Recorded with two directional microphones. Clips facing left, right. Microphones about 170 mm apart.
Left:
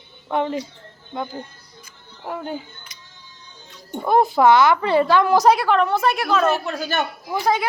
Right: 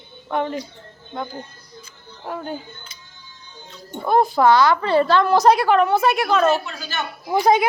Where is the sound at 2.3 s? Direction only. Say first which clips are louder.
Even; 15° left (ahead or behind).